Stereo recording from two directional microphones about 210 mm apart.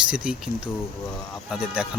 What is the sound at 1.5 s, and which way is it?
Speech, 5° right (ahead or behind).